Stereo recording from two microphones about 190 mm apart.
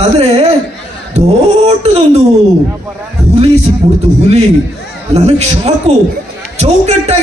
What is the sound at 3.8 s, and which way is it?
Speech, 30° right (ahead or behind).